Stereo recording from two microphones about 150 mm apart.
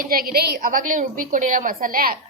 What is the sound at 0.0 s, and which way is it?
A woman's voice, 75° right (ahead or behind).